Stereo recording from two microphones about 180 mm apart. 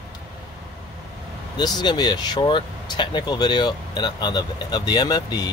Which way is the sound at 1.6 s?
25° left (ahead or behind).